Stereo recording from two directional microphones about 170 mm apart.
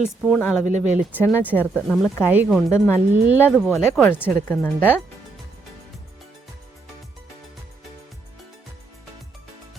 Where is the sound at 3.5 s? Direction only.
10° left (ahead or behind).